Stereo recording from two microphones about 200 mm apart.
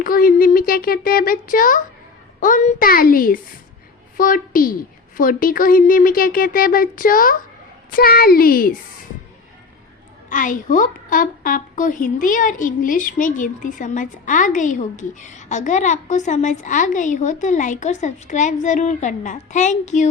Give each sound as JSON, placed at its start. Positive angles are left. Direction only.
{"t": 0.0, "sound": "a woman's voice", "side_deg": 45}
{"t": 10.2, "sound": "a woman's voice", "side_deg": 40}